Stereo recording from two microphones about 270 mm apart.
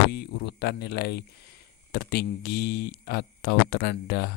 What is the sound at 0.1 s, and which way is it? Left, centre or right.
Speech, left.